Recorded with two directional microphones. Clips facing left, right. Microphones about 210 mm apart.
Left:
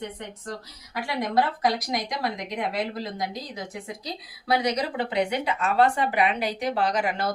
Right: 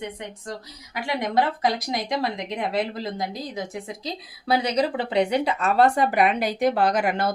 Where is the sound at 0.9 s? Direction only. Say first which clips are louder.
Right 1 dB; 20° right (ahead or behind).